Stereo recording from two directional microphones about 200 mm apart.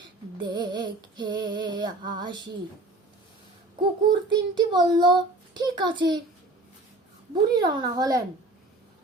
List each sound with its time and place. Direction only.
0.3 s a child's voice: 20° right (ahead or behind)
3.8 s a child's voice: 25° right (ahead or behind)
7.5 s a child's voice: 20° right (ahead or behind)